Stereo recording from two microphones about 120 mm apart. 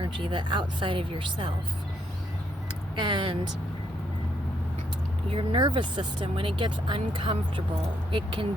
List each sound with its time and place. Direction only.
0.0 s speech: 40° right (ahead or behind)
3.0 s speech: 40° right (ahead or behind)
5.3 s speech: 45° right (ahead or behind)